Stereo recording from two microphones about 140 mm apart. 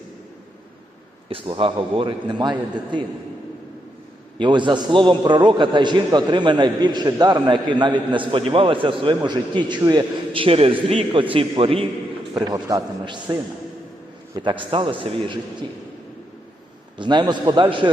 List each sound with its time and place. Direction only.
1.3 s a man's voice: 40° right (ahead or behind)
4.4 s a man's voice: 35° right (ahead or behind)
12.3 s a man's voice: 30° right (ahead or behind)
14.4 s a man's voice: 35° right (ahead or behind)
17.0 s a man's voice: 35° right (ahead or behind)